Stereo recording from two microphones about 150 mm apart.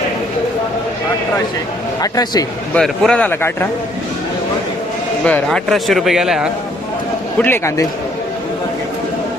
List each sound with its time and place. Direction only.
2.0 s a man's voice: 25° left (ahead or behind)
2.7 s a man's voice: 5° left (ahead or behind)
5.2 s speech: 5° left (ahead or behind)
7.3 s a man's voice: 15° left (ahead or behind)